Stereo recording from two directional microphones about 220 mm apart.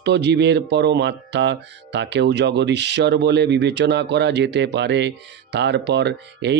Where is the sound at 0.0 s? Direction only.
50° right (ahead or behind).